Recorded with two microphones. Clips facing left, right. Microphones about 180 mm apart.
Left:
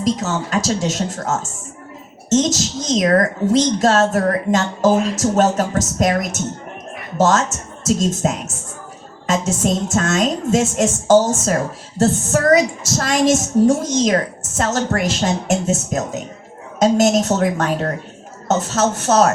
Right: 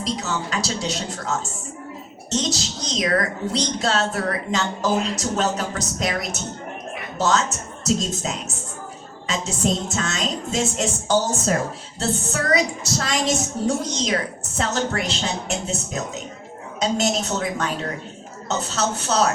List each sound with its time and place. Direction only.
0.0 s speech: 45° left (ahead or behind)